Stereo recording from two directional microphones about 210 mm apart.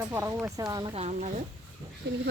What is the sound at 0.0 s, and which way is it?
Speech, 10° right (ahead or behind).